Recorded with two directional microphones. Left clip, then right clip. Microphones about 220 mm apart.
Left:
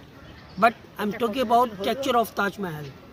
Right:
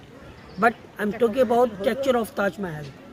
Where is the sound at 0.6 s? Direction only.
45° left (ahead or behind).